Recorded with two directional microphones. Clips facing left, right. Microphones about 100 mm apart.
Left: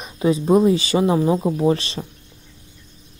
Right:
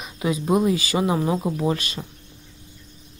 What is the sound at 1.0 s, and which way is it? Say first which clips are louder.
Speech: left 4 dB; 20° right (ahead or behind).